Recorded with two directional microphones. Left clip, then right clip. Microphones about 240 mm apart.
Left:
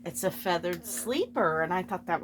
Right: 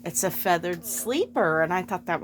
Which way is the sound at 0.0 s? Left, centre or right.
Right.